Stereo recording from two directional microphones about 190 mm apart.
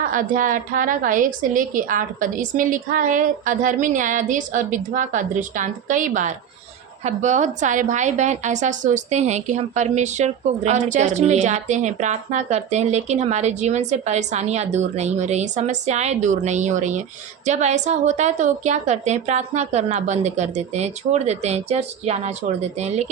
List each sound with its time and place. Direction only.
0.1 s a woman's voice: 45° right (ahead or behind)